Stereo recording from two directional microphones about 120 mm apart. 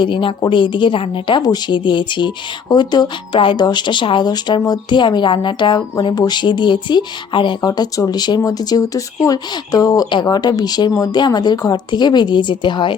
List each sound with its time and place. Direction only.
0.0 s speech: 45° left (ahead or behind)
1.4 s speech: 35° left (ahead or behind)
7.7 s speech: 30° left (ahead or behind)